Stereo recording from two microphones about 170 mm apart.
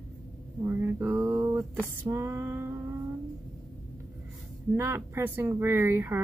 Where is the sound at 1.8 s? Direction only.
15° right (ahead or behind).